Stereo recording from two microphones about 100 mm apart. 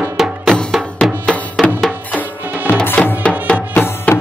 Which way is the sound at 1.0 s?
10° left (ahead or behind).